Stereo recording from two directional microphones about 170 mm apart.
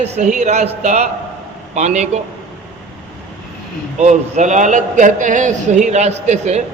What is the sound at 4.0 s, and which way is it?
A man's voice, 45° right (ahead or behind).